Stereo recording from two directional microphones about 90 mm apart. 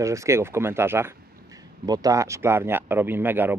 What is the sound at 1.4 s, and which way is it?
A man's voice, 45° right (ahead or behind).